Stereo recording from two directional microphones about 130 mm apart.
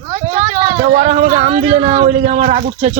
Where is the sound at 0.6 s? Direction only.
40° right (ahead or behind).